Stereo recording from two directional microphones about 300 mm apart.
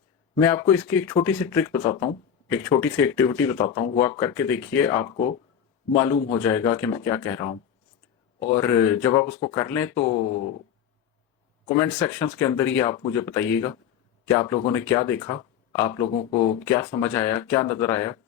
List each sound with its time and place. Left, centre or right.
0.3 s speech: centre
8.4 s speech: centre
11.7 s speech: centre